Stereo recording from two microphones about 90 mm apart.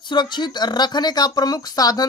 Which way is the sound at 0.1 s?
55° left (ahead or behind).